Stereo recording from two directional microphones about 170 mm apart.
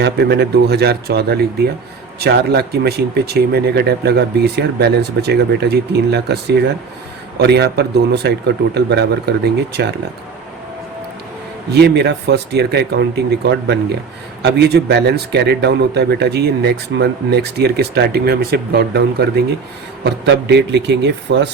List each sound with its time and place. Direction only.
0.0 s a man's voice: 80° right
11.7 s a man's voice: 75° right (ahead or behind)
20.1 s speech: 90° right